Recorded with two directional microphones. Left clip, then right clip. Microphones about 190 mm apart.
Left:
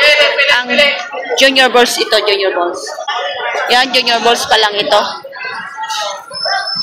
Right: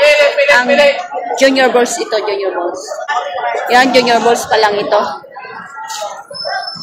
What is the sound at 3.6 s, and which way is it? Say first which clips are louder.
Speech: right 2 dB; centre (ahead or behind).